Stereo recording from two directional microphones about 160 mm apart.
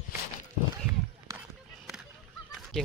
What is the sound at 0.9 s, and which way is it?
Run, 15° right (ahead or behind).